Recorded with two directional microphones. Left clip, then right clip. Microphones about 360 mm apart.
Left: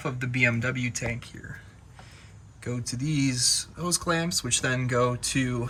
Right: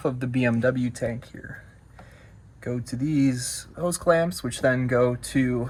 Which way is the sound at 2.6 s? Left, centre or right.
Centre.